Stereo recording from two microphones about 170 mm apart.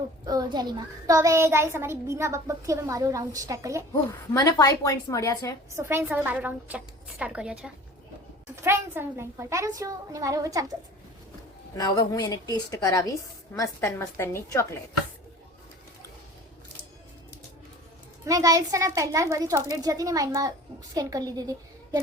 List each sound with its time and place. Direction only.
0.3 s a child's voice: 25° right (ahead or behind)
3.9 s a woman's voice: 20° left (ahead or behind)
5.7 s a child's voice: 15° right (ahead or behind)
11.8 s a woman's voice: 20° left (ahead or behind)
18.3 s a woman's voice: 20° right (ahead or behind)